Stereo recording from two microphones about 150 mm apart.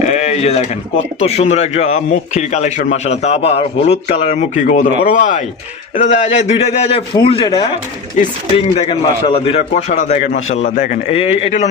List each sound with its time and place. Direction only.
0.1 s a sound: 45° left (ahead or behind)
1.2 s a man's voice: 45° left (ahead or behind); by 11.0 s 60° left (ahead or behind)
11.1 s a man's voice: 40° left (ahead or behind)